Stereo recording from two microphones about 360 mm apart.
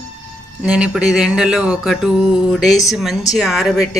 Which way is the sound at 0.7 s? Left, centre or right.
Centre.